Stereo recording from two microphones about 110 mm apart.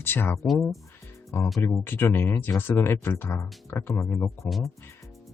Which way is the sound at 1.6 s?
20° left (ahead or behind).